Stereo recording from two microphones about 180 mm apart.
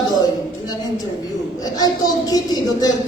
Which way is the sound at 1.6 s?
20° left (ahead or behind).